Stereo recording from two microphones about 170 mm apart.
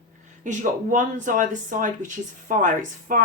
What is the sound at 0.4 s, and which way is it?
A woman's voice, 50° right (ahead or behind).